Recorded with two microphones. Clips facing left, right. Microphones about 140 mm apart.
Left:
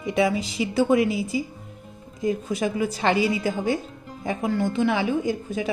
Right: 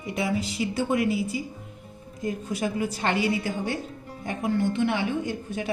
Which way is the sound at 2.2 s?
90° left.